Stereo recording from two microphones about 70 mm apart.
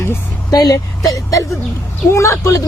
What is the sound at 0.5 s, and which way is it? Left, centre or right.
Speech, left.